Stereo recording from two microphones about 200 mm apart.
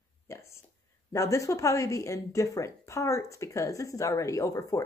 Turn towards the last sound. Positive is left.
turn(degrees=15)  # may be behind; listen again after turning